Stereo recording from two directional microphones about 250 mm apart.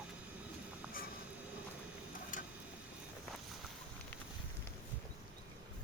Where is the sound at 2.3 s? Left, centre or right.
Left.